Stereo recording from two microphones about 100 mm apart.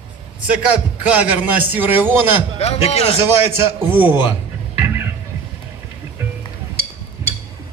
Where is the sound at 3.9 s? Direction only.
15° right (ahead or behind).